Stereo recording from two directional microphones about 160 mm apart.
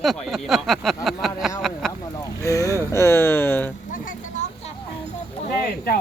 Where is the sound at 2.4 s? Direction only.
20° left (ahead or behind).